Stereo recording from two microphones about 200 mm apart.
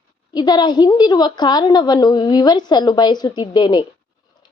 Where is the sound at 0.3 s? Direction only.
20° left (ahead or behind).